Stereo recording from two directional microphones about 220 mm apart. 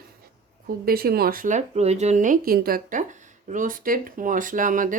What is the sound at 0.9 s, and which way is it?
Speech, 45° right (ahead or behind).